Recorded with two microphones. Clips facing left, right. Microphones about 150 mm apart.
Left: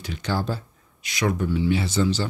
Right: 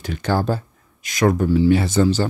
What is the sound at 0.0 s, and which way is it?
Speech, 50° right (ahead or behind).